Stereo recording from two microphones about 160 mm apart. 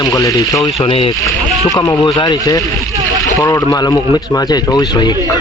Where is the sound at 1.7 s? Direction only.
25° left (ahead or behind).